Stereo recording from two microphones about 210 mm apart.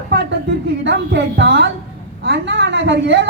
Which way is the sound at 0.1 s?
55° right (ahead or behind).